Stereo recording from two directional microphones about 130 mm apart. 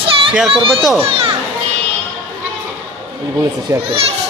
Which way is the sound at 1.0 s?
45° right (ahead or behind).